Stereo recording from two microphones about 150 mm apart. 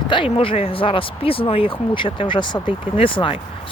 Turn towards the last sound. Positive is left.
turn(degrees=35)  # may be behind; listen again after turning